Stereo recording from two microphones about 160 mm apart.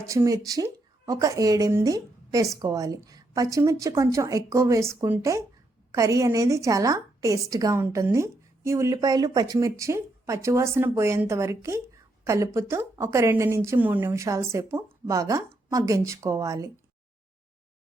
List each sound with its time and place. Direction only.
0.1 s a woman's voice: 20° right (ahead or behind)